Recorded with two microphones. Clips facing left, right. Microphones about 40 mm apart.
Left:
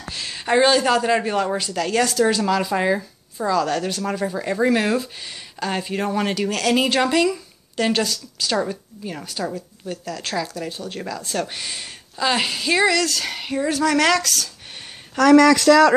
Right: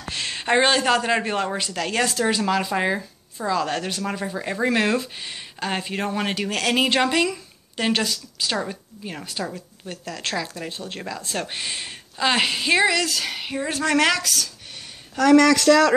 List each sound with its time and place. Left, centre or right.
0.1 s a sound: right
0.4 s speech: right; by 3.0 s centre
3.4 s speech: right
4.3 s speech: centre
4.6 s speech: right
12.8 s speech: centre
13.7 s speech: right
14.0 s speech: centre
15.2 s speech: left